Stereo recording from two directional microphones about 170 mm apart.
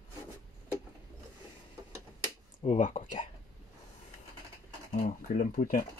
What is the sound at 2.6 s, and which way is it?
Speech, 40° left (ahead or behind).